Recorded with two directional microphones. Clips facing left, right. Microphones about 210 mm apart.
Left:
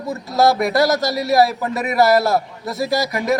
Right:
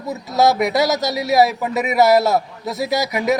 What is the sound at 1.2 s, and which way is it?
Speech, 20° right (ahead or behind).